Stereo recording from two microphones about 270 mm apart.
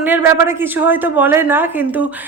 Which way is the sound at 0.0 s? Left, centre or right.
Centre.